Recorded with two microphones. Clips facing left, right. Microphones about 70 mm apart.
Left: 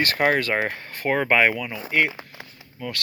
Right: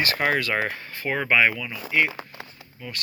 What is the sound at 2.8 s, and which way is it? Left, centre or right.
Speech, left.